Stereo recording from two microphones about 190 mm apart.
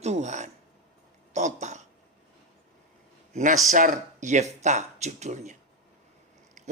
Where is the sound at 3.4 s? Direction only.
40° right (ahead or behind).